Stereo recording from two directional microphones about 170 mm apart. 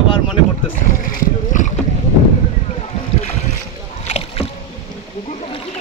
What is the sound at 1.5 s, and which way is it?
Boat, 50° left (ahead or behind).